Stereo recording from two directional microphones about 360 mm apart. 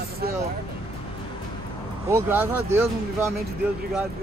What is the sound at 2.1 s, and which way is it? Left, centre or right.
Speech, centre.